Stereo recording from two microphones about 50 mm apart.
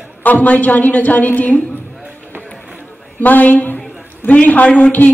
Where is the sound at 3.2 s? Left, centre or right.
Left.